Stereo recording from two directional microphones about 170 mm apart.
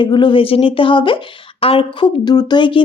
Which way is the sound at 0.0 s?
30° left (ahead or behind).